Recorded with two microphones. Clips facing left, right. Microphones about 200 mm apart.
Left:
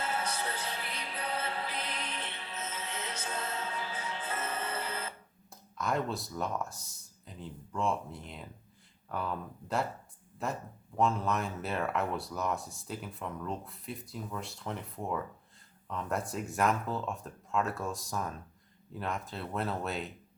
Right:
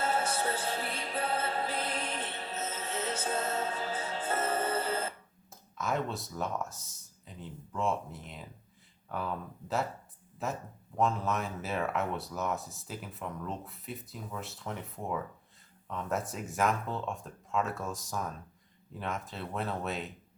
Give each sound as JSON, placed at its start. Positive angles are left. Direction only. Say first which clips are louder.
{"t": 0.0, "sound": "music", "louder": "right 4 dB", "side_deg": -50}
{"t": 5.7, "sound": "speech", "louder": "left 1 dB", "side_deg": 0}